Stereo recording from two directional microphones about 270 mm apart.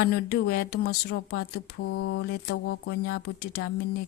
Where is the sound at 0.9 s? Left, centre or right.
Left.